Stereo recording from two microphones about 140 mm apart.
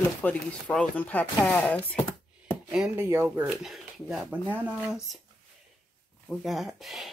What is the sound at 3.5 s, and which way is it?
Speech, centre (ahead or behind).